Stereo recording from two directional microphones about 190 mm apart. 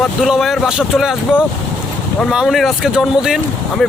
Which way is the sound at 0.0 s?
Centre (ahead or behind).